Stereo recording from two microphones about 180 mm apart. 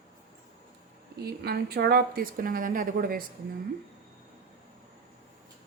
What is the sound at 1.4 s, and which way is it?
Speech, 65° right (ahead or behind).